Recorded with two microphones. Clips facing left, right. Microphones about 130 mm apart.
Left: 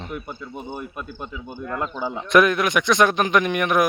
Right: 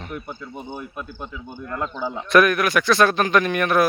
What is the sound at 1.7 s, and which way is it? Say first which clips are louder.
Speech: even; 5° left (ahead or behind).